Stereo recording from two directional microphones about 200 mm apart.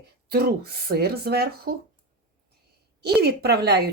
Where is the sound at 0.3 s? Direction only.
50° right (ahead or behind).